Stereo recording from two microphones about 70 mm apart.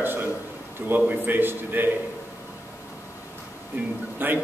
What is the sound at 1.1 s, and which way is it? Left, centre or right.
Speech, right.